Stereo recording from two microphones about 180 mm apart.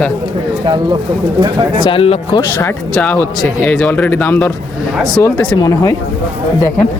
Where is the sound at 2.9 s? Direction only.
10° left (ahead or behind).